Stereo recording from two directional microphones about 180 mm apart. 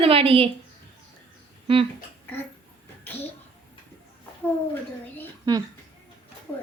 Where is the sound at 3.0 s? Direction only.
10° left (ahead or behind).